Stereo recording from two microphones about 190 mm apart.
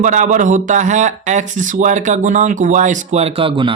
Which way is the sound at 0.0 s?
40° right (ahead or behind).